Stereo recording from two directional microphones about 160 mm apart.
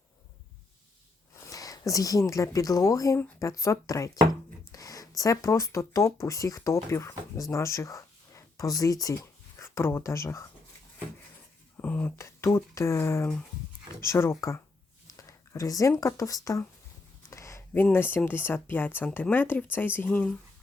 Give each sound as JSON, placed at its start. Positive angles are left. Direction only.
{"t": 1.5, "sound": "speech", "side_deg": 20}
{"t": 7.5, "sound": "a sound", "side_deg": 20}
{"t": 8.8, "sound": "speech", "side_deg": 20}
{"t": 11.8, "sound": "speech", "side_deg": 10}
{"t": 17.2, "sound": "a sound", "side_deg": 20}
{"t": 17.8, "sound": "speech", "side_deg": 15}